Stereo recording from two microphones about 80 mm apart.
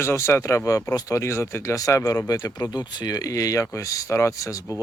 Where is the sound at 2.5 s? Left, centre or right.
Left.